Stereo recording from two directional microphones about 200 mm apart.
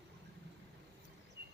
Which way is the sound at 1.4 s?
55° right (ahead or behind).